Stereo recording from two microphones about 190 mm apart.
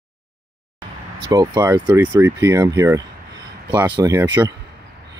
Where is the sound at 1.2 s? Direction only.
20° right (ahead or behind).